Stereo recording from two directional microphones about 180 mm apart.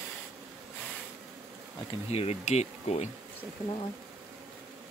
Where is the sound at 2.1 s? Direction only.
35° left (ahead or behind).